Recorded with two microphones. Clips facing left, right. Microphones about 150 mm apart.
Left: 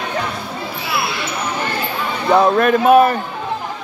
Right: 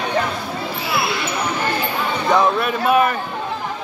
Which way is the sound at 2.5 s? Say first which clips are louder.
Left 6 dB; 45° left (ahead or behind).